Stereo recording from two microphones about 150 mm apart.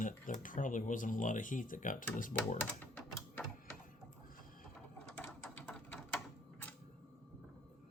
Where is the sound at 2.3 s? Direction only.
15° left (ahead or behind).